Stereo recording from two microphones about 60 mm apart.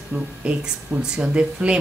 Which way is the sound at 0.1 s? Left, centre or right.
Right.